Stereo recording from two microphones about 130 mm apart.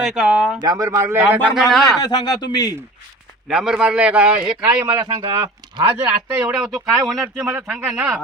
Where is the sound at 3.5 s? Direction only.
5° right (ahead or behind).